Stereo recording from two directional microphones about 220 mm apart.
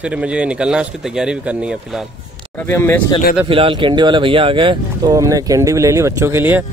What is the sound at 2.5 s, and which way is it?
Speech, 10° left (ahead or behind).